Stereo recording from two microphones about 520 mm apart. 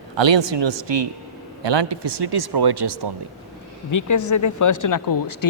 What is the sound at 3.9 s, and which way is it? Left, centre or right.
Speech, left.